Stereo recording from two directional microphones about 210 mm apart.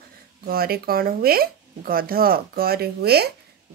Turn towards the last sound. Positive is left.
turn(degrees=-50)  # may be behind; listen again after turning